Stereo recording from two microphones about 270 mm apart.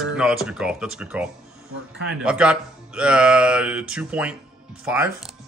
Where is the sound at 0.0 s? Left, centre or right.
Centre.